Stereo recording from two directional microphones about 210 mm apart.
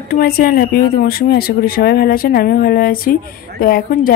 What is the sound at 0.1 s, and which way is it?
Speech, 45° left (ahead or behind).